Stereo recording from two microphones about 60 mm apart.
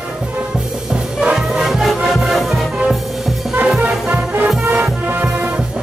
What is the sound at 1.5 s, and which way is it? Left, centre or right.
Music, centre.